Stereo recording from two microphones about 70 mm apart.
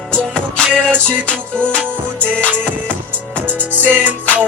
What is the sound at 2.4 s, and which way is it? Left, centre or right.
Music, right.